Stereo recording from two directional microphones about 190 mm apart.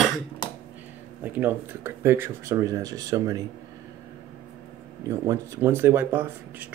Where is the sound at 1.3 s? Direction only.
10° right (ahead or behind).